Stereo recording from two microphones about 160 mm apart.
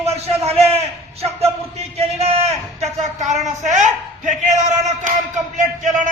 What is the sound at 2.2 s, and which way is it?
Child singing, 40° right (ahead or behind).